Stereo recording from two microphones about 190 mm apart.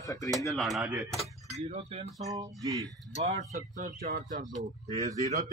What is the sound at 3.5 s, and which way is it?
Speech, 45° right (ahead or behind).